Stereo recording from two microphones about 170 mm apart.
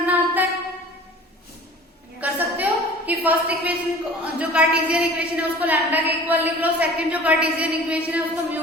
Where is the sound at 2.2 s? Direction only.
10° right (ahead or behind).